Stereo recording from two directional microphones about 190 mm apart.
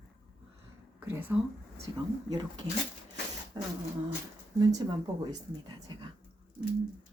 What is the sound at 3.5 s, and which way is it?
Speech, 20° right (ahead or behind).